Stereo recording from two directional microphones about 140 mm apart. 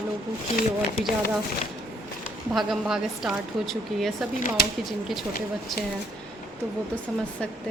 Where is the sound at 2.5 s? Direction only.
Centre (ahead or behind).